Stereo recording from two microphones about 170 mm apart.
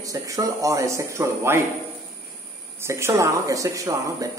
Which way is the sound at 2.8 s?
15° right (ahead or behind).